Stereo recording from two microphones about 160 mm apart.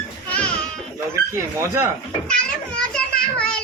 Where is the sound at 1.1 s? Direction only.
15° right (ahead or behind).